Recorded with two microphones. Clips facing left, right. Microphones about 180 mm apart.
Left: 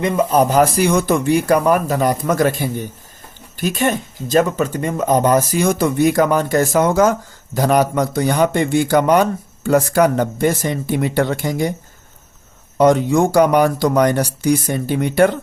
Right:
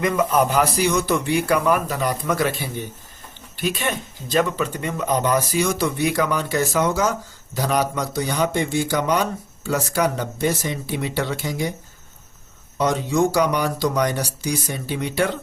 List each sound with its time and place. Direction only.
0.0 s speech: 30° left (ahead or behind); by 11.7 s 50° left (ahead or behind)
12.7 s speech: 55° left (ahead or behind)